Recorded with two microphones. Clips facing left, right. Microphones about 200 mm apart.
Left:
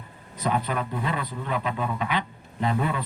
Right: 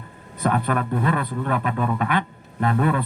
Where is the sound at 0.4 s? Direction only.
55° right (ahead or behind).